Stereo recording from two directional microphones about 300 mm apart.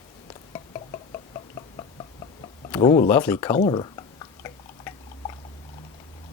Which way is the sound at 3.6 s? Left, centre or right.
Centre.